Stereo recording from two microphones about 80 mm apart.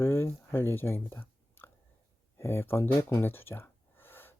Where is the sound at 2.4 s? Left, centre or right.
Left.